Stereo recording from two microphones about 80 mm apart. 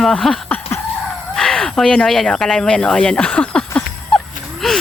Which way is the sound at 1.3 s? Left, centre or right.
Centre.